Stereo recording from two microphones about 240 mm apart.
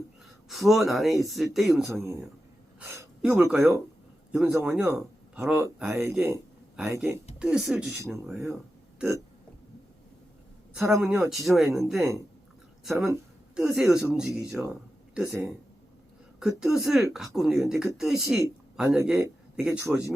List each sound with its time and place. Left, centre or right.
0.4 s speech: centre
9.0 s burping: centre
10.8 s speech: centre